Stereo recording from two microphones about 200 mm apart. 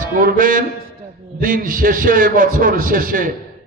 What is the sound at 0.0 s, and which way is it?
A man's voice, 45° right (ahead or behind).